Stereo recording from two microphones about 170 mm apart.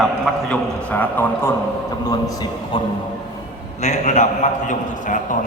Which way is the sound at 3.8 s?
45° left (ahead or behind).